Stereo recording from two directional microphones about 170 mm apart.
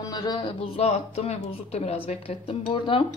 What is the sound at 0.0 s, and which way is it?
Speech, 25° left (ahead or behind).